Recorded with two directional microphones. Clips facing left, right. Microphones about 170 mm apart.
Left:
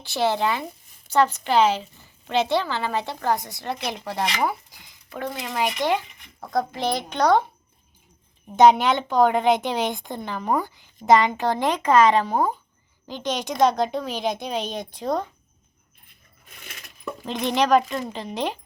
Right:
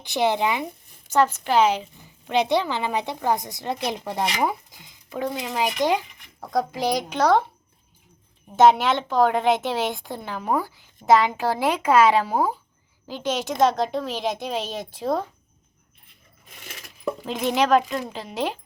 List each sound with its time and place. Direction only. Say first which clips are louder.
0.0 s a woman's voice: right 1 dB; 15° right (ahead or behind)
8.4 s a woman's voice: left 1 dB; centre (ahead or behind)
17.2 s a woman's voice: even; 5° right (ahead or behind)